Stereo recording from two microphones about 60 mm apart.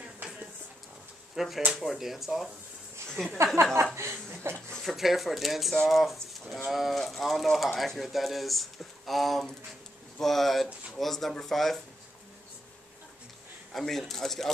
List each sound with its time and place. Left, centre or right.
1.3 s speech: centre
3.6 s speech: right
4.7 s speech: centre
13.7 s speech: centre